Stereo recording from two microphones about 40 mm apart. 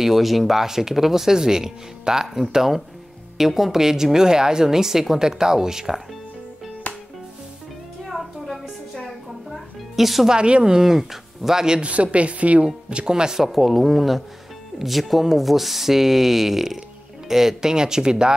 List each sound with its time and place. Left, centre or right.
0.0 s a woman's voice: centre
2.2 s a woman's voice: centre
8.0 s music: centre
10.3 s speech: right
10.7 s a woman's voice: centre
11.8 s a woman's voice: right
12.9 s a woman's voice: centre